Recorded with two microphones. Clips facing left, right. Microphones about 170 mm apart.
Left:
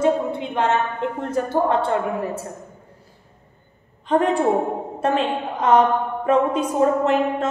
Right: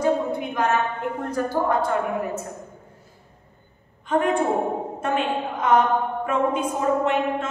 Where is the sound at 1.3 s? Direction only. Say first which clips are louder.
Left 3 dB; 25° left (ahead or behind).